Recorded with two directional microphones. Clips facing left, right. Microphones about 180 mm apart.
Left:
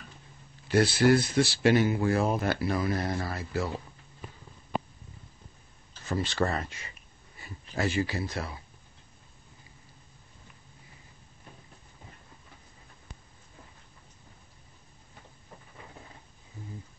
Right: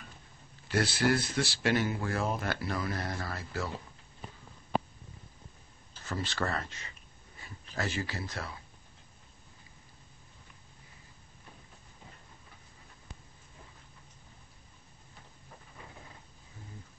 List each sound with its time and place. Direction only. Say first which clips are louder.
0.7 s speech: left 6 dB; 15° left (ahead or behind)
6.0 s speech: left 6 dB; 15° left (ahead or behind)